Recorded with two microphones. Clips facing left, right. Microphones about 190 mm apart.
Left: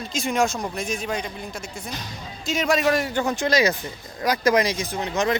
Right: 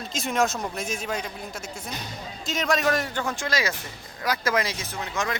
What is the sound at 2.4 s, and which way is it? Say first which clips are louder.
Speech: left 3 dB; centre (ahead or behind).